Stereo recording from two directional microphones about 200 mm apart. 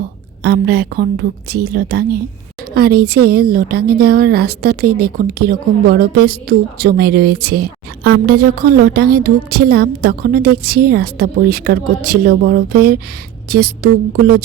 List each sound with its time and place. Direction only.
0.4 s a woman's voice: 55° right (ahead or behind)